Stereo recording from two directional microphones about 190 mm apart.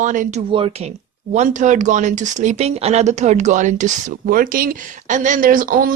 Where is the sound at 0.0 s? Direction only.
40° right (ahead or behind).